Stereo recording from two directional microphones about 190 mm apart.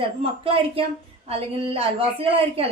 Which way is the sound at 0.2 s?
30° right (ahead or behind).